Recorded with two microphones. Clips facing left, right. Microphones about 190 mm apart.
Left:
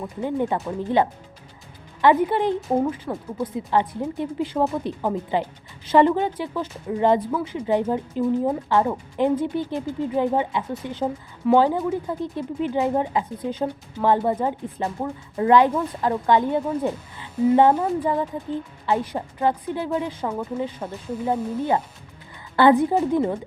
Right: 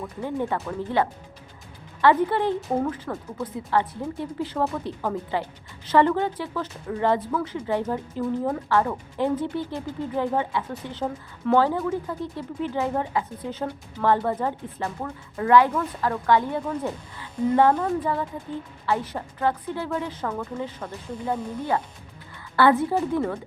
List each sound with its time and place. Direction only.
0.0 s speech: 15° left (ahead or behind)
20.8 s speech: 25° left (ahead or behind)